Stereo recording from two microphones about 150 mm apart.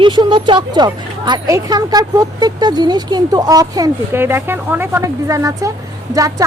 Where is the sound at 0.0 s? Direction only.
35° right (ahead or behind).